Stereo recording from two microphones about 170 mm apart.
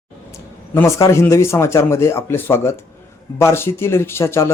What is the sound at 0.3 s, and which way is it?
Speech, 15° left (ahead or behind).